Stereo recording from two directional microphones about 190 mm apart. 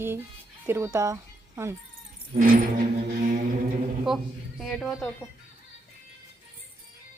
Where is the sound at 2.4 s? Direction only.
45° right (ahead or behind).